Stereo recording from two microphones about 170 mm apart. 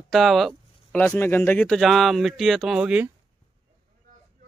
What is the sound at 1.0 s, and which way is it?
Speech, 10° left (ahead or behind).